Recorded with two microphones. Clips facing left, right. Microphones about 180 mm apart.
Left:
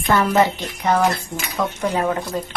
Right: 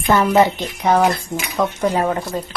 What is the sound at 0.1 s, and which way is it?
Speech, 20° right (ahead or behind).